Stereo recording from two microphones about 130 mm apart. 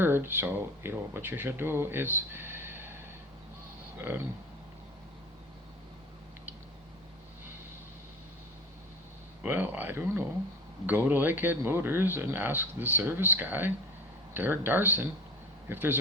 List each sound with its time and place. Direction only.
0.0 s speech: 15° right (ahead or behind)
9.4 s speech: 15° right (ahead or behind)